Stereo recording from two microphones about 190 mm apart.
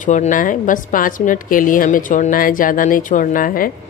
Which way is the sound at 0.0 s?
40° left (ahead or behind).